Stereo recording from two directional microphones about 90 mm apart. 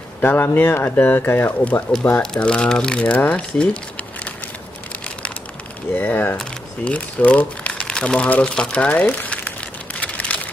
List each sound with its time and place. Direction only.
0.2 s speech: 20° left (ahead or behind)
5.9 s speech: 20° left (ahead or behind)
9.9 s a sound: 15° left (ahead or behind)